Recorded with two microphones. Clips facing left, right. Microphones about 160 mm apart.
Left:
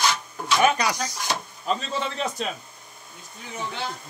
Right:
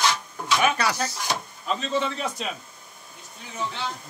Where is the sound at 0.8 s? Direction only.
15° left (ahead or behind).